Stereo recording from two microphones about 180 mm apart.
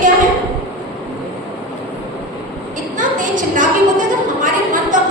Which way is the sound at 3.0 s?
45° right (ahead or behind).